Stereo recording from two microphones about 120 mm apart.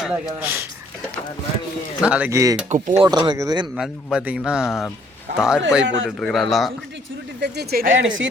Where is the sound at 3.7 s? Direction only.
5° right (ahead or behind).